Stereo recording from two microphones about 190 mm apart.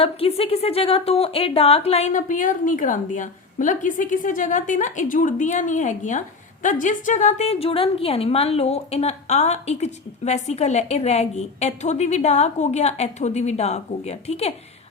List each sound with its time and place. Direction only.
0.0 s a woman's voice: 30° left (ahead or behind)